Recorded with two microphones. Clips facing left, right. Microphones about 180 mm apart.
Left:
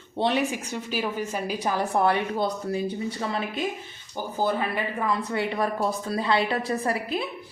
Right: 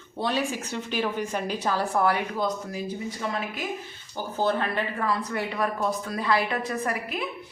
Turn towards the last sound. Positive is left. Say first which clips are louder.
# left 3 dB
turn(degrees=30)  # may be behind; listen again after turning